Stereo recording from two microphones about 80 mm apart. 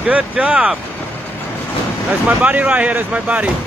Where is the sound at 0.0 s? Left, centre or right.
Centre.